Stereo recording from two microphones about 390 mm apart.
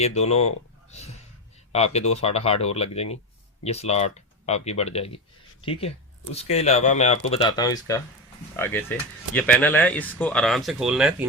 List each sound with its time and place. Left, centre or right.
0.0 s speech: centre
1.7 s speech: centre